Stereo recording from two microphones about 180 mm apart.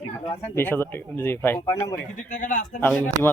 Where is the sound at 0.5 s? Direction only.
10° left (ahead or behind).